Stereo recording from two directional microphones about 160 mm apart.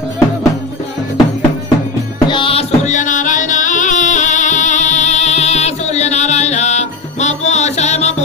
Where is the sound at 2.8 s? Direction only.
50° left (ahead or behind).